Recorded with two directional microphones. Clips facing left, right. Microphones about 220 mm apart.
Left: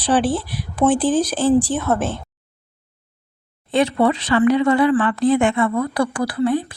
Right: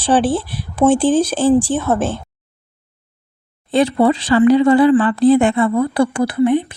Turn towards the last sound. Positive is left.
turn(degrees=-20)  # may be behind; listen again after turning